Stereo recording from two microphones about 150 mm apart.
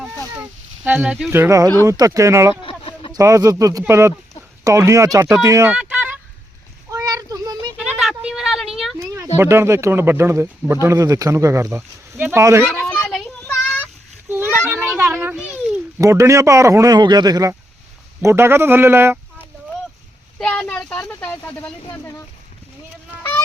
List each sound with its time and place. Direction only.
0.9 s speech: 10° right (ahead or behind)
2.6 s a sound: 35° left (ahead or behind)
3.1 s speech: 20° right (ahead or behind)
5.7 s vehicle: 10° right (ahead or behind)
6.9 s child singing: 25° right (ahead or behind)
7.8 s a sound: 5° right (ahead or behind)
9.4 s speech: 15° right (ahead or behind)
12.7 s child singing: 10° left (ahead or behind)
14.3 s a sound: 15° right (ahead or behind)
14.7 s children playing: 15° right (ahead or behind)
16.0 s speech: 20° right (ahead or behind)
20.4 s speech: 10° left (ahead or behind)